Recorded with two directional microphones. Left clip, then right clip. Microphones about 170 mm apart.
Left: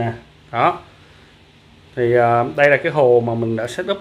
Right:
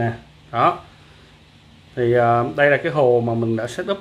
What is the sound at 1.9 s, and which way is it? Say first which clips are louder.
Speech: left 2 dB; 15° left (ahead or behind).